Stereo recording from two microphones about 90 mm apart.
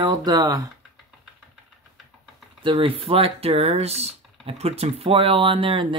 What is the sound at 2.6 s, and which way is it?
Speech, 90° right.